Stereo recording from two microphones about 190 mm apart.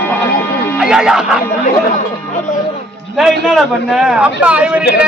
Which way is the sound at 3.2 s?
Centre (ahead or behind).